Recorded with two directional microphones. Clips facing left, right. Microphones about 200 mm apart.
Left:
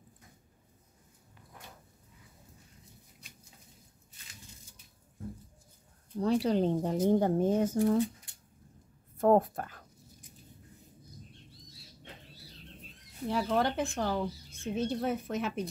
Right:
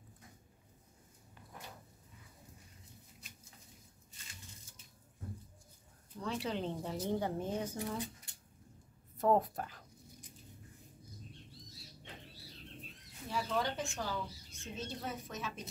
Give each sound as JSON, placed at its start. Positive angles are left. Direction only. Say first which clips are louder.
{"t": 6.1, "sound": "speech", "louder": "left 11 dB", "side_deg": 40}
{"t": 9.2, "sound": "speech", "louder": "left 6 dB", "side_deg": 50}
{"t": 13.3, "sound": "speech", "louder": "left 7 dB", "side_deg": 60}